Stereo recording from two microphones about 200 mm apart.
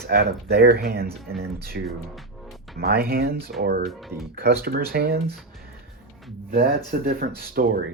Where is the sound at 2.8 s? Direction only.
50° right (ahead or behind).